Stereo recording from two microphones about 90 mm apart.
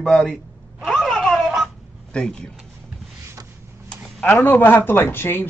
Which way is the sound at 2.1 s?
10° left (ahead or behind).